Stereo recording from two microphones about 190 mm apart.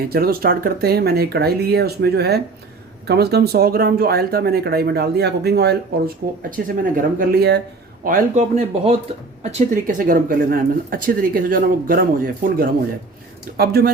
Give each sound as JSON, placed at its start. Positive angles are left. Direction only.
{"t": 0.1, "sound": "speech", "side_deg": -55}
{"t": 6.2, "sound": "speech", "side_deg": -45}
{"t": 8.0, "sound": "speech", "side_deg": -40}